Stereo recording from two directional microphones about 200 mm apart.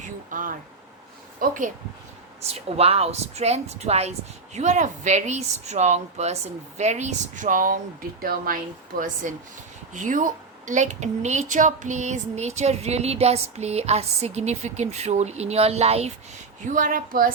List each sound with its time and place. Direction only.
0.3 s a woman's voice: 45° right (ahead or behind)